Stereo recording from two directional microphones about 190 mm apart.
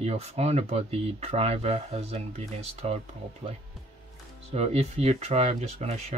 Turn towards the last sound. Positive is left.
turn(degrees=-35)  # may be behind; listen again after turning